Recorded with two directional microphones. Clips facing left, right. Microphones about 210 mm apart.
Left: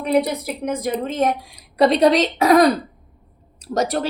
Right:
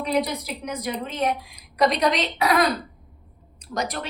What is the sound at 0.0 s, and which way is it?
A woman's voice, 55° left (ahead or behind).